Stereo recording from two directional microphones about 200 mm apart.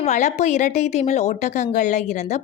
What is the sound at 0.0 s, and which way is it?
A woman's voice, 35° left (ahead or behind).